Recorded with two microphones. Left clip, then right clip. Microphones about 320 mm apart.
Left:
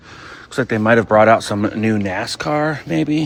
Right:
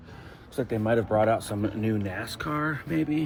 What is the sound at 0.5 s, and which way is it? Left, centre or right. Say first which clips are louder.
Speech: left 11 dB; left.